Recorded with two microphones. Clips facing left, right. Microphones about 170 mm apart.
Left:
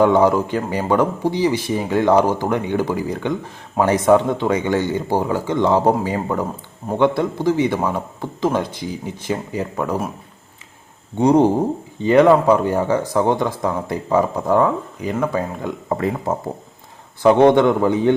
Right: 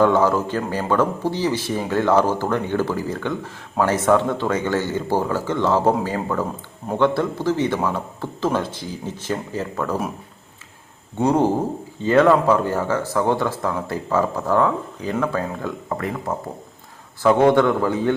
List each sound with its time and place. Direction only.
0.0 s a man's voice: 15° left (ahead or behind)
11.2 s a man's voice: 15° left (ahead or behind)
17.2 s a man's voice: 20° left (ahead or behind)